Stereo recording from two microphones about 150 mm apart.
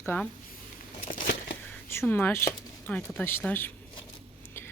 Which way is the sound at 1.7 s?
15° left (ahead or behind).